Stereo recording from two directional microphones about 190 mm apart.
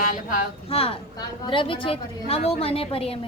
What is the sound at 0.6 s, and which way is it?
A woman's voice, 30° left (ahead or behind).